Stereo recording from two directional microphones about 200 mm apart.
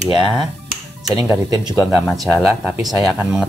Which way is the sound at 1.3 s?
15° right (ahead or behind).